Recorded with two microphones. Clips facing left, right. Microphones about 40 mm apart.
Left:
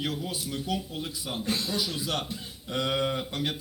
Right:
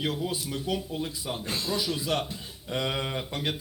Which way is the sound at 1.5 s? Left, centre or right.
Right.